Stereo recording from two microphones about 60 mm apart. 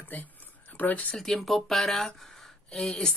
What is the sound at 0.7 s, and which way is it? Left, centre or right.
Speech, left.